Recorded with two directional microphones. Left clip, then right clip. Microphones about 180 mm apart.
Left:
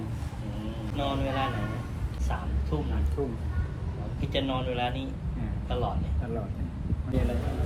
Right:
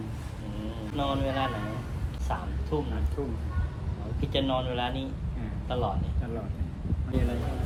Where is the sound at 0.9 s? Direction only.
15° right (ahead or behind).